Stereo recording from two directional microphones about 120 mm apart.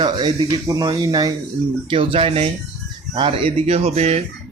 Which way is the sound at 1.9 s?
50° right (ahead or behind).